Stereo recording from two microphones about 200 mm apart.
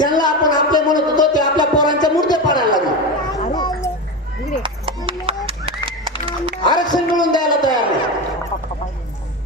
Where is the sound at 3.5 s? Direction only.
20° left (ahead or behind).